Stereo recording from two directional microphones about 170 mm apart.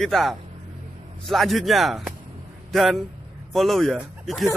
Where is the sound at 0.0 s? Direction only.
Centre (ahead or behind).